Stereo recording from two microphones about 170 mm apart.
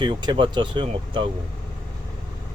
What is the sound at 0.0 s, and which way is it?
Speech, 25° right (ahead or behind).